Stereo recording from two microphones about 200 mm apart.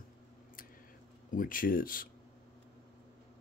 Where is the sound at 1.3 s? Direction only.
45° left (ahead or behind).